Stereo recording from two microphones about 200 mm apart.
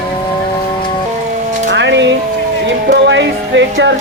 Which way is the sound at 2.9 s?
60° right (ahead or behind).